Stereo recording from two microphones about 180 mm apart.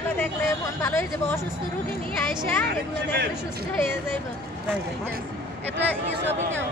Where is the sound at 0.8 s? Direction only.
15° left (ahead or behind).